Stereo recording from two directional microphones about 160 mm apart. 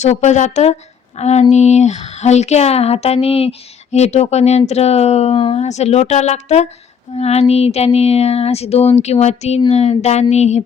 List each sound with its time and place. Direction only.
0.0 s speech: 45° left (ahead or behind)
7.1 s a sound: 40° left (ahead or behind)
9.6 s speech: 40° left (ahead or behind)